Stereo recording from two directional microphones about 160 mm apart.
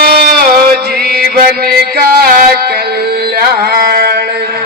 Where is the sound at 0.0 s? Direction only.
75° right (ahead or behind).